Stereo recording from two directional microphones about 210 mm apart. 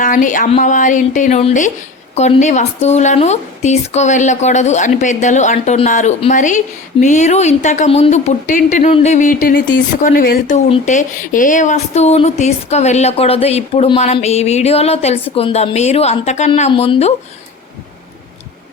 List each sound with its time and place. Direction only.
0.0 s a woman's voice: 35° left (ahead or behind)